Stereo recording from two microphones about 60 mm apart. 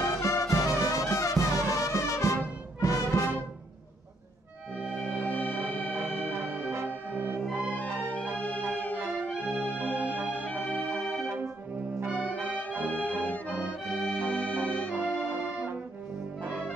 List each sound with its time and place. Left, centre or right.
0.0 s music: left
4.9 s music: centre
5.9 s music: right
6.9 s brass instrument: right
7.7 s music: left
8.4 s organ: left
9.4 s music: left
9.9 s music: right
10.4 s music: left
12.8 s music: left
13.2 s accordion: left
14.3 s music: left
15.3 s music: right